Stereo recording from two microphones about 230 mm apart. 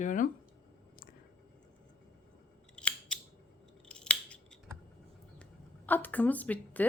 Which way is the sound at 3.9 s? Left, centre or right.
Centre.